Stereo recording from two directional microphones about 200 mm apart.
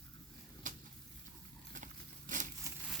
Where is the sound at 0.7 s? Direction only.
40° right (ahead or behind).